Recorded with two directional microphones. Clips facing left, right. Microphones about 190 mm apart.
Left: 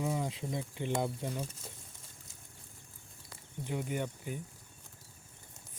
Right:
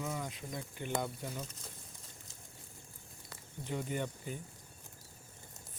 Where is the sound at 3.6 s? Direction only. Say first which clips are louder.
Left 1 dB; 10° left (ahead or behind).